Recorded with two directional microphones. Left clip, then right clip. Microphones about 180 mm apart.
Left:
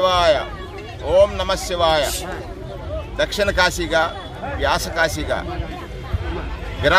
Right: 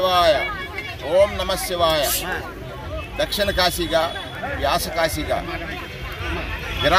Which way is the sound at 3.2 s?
30° left (ahead or behind).